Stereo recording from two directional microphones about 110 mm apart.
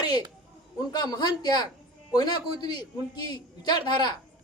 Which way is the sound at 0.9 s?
40° left (ahead or behind).